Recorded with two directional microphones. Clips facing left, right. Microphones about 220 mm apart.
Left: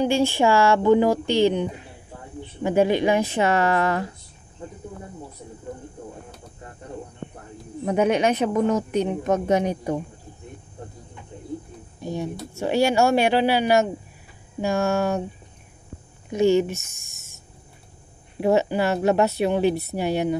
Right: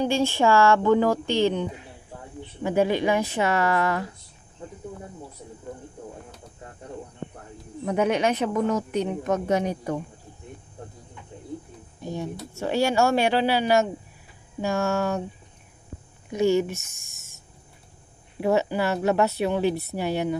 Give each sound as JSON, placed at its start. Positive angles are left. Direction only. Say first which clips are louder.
{"t": 0.0, "sound": "a woman's voice", "louder": "left 2 dB", "side_deg": 10}
{"t": 7.8, "sound": "a woman's voice", "louder": "left 3 dB", "side_deg": 20}
{"t": 12.0, "sound": "speech", "louder": "left 3 dB", "side_deg": 15}
{"t": 16.3, "sound": "a woman's voice", "louder": "left 3 dB", "side_deg": 25}
{"t": 18.4, "sound": "a woman's voice", "louder": "left 3 dB", "side_deg": 20}